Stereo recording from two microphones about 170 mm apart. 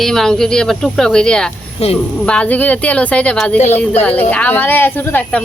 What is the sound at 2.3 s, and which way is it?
Speech, 10° left (ahead or behind).